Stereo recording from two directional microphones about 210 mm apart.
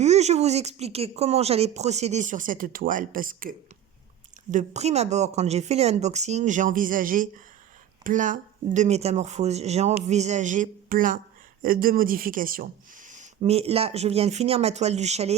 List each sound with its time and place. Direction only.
0.0 s speech: 30° right (ahead or behind)
4.5 s speech: 30° right (ahead or behind)